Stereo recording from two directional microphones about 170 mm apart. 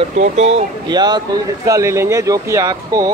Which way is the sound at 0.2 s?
40° right (ahead or behind).